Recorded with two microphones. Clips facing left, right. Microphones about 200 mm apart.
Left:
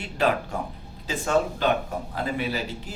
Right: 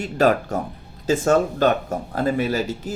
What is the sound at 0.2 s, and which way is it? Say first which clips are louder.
Speech: right 6 dB; 45° right (ahead or behind).